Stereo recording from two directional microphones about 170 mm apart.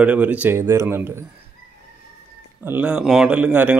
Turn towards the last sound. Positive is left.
turn(degrees=-10)  # may be behind; listen again after turning